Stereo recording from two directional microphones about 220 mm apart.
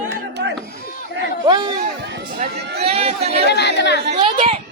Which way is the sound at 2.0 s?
50° right (ahead or behind).